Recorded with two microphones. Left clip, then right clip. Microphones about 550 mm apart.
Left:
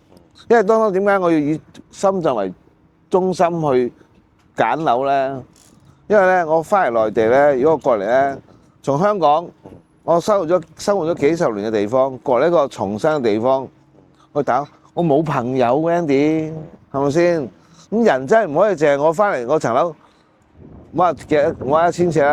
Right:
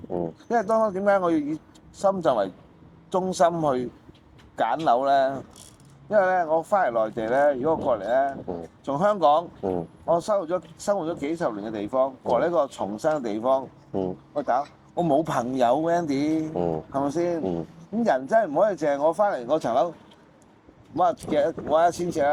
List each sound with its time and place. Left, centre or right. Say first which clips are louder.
0.4 s speech: left 9 dB; left
20.9 s speech: left 7 dB; left